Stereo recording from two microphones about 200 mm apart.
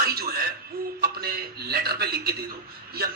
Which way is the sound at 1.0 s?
50° right (ahead or behind).